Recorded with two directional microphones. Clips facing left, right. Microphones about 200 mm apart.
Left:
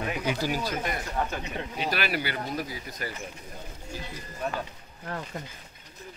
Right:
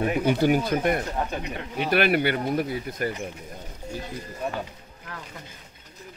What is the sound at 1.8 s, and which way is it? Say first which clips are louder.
Speech: right 9 dB; 60° right (ahead or behind).